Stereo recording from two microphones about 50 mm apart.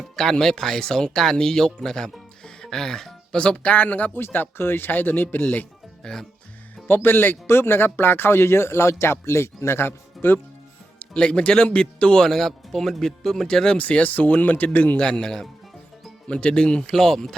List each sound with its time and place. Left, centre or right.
0.2 s speech: centre
2.4 s music: centre
3.3 s speech: left
6.0 s speech: centre
6.8 s speech: left
11.0 s speech: left
13.7 s speech: left
14.9 s speech: centre
16.3 s speech: left
16.9 s speech: centre